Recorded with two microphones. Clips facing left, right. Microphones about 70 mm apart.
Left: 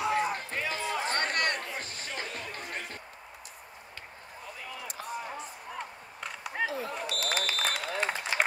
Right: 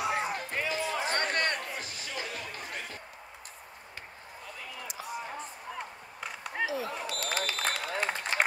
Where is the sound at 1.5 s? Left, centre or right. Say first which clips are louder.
Even; left.